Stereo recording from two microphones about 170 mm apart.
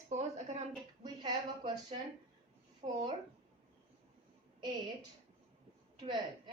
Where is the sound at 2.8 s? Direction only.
40° right (ahead or behind).